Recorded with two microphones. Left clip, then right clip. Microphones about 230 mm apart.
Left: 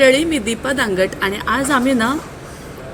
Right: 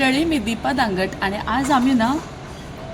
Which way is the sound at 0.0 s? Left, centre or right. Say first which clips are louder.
Left 6 dB; centre.